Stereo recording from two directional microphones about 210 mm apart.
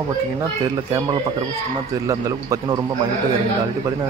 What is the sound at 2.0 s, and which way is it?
Speech, 15° right (ahead or behind).